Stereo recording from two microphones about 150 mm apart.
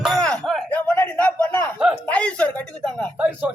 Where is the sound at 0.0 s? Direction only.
5° left (ahead or behind).